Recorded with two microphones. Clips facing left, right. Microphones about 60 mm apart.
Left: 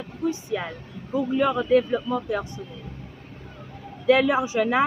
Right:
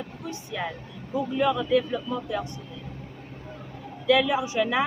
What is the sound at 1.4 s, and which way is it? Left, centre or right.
Speech, left.